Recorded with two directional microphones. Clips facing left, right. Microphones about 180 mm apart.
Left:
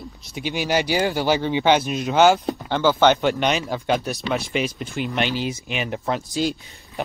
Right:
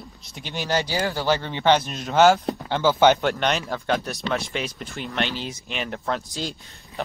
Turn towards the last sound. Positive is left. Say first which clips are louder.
# left 2 dB
turn(degrees=10)  # may be behind; listen again after turning